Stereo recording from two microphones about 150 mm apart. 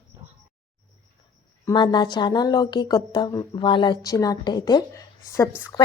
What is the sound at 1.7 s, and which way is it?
A woman's voice, 30° left (ahead or behind).